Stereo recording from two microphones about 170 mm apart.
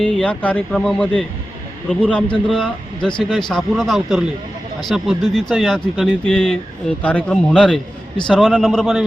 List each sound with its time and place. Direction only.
0.0 s speech: 5° left (ahead or behind)